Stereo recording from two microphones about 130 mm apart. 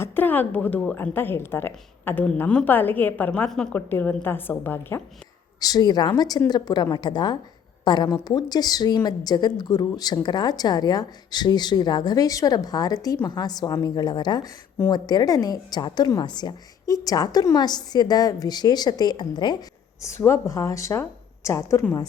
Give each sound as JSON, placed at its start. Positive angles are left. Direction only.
{"t": 0.0, "sound": "a woman's voice", "side_deg": 15}
{"t": 5.5, "sound": "a woman's voice", "side_deg": 30}
{"t": 20.0, "sound": "speech", "side_deg": 20}